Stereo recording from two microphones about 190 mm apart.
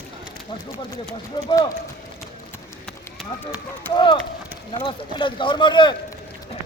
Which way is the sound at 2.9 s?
5° left (ahead or behind).